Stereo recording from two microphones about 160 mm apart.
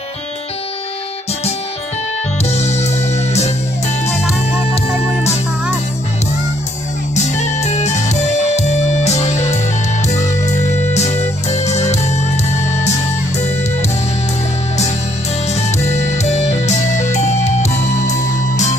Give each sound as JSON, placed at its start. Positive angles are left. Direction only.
{"t": 2.4, "sound": "music", "side_deg": 45}
{"t": 4.1, "sound": "music", "side_deg": 0}
{"t": 7.2, "sound": "music", "side_deg": 45}
{"t": 15.4, "sound": "music", "side_deg": 45}